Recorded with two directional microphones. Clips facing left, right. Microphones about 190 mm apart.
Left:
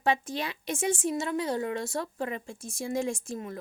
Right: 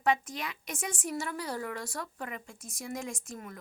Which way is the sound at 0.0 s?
30° left (ahead or behind).